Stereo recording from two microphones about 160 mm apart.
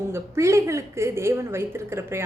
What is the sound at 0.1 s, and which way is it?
A woman's voice, 20° right (ahead or behind).